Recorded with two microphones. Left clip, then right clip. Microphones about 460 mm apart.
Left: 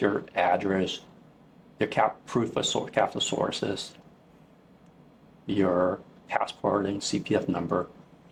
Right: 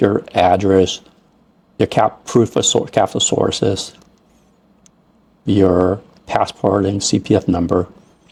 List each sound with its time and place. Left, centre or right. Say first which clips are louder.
0.0 s speech: right 11 dB; right
5.5 s speech: right 11 dB; right